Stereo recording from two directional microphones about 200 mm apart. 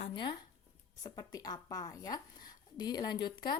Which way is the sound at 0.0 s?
25° left (ahead or behind).